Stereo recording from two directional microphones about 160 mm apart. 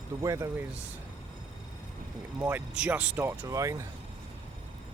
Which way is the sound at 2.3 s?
15° right (ahead or behind).